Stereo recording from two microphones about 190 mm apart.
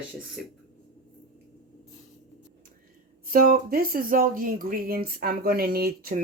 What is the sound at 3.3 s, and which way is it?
Speech, 45° right (ahead or behind).